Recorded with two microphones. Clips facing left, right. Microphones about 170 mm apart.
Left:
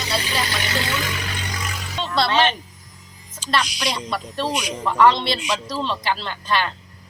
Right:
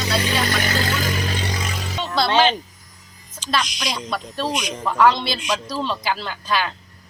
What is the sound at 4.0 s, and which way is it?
Speech, centre (ahead or behind).